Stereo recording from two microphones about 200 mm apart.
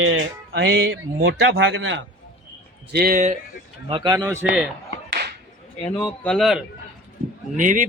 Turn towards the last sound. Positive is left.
turn(degrees=-40)  # may be behind; listen again after turning